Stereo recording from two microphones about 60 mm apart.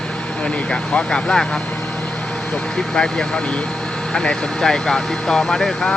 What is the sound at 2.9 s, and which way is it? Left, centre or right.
Speech, centre.